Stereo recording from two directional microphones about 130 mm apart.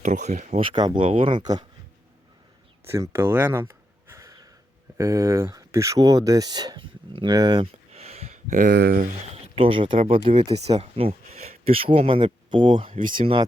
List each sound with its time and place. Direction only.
0.0 s speech: 75° right (ahead or behind)
0.6 s speech: 35° right (ahead or behind)
2.9 s a sound: 20° right (ahead or behind)
4.9 s speech: 25° right (ahead or behind); by 8.4 s 55° right (ahead or behind)
8.4 s speech: 85° right
9.3 s speech: 45° right (ahead or behind)
10.8 s speech: 50° right (ahead or behind)